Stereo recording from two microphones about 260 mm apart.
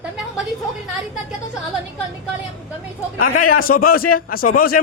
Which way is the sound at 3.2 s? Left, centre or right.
Left.